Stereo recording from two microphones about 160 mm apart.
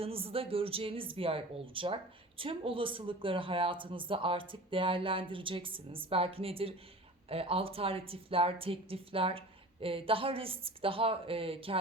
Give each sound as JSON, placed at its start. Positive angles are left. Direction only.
{"t": 0.0, "sound": "speech", "side_deg": -35}